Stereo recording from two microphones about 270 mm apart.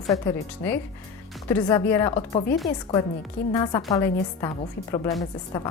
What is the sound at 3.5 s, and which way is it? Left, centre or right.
Speech, centre.